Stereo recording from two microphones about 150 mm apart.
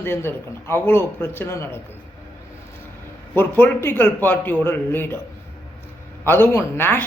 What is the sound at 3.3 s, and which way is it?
A woman's voice, 15° left (ahead or behind).